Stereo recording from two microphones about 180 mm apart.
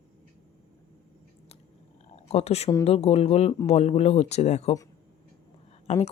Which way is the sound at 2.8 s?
35° left (ahead or behind).